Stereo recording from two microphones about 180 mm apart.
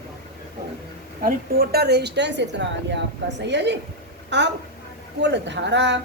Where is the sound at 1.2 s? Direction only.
60° right (ahead or behind).